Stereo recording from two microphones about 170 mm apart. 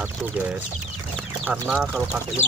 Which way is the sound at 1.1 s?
5° right (ahead or behind).